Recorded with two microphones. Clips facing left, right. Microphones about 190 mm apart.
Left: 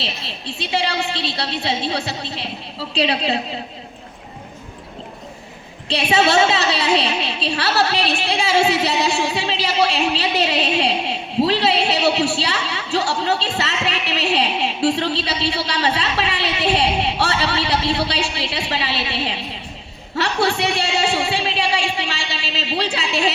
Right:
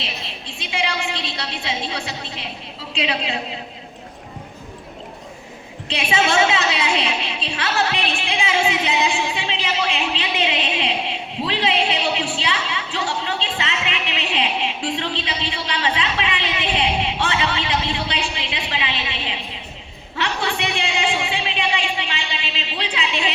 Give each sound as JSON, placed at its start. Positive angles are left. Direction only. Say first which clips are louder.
{"t": 0.6, "sound": "a woman's voice", "louder": "left 3 dB", "side_deg": 35}
{"t": 5.9, "sound": "a woman's voice", "louder": "left 3 dB", "side_deg": 35}
{"t": 20.1, "sound": "a sound", "louder": "left 5 dB", "side_deg": 40}
{"t": 22.5, "sound": "a woman's voice", "louder": "left 7 dB", "side_deg": 40}